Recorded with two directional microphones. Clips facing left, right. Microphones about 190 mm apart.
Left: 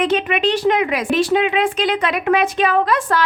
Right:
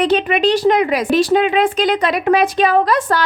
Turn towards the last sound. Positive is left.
turn(degrees=-40)  # may be behind; listen again after turning